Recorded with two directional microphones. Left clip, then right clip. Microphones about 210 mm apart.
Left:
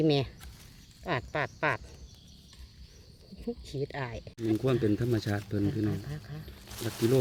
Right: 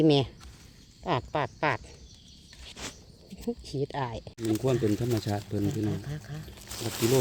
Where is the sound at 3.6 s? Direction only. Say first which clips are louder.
Right 4 dB; 20° right (ahead or behind).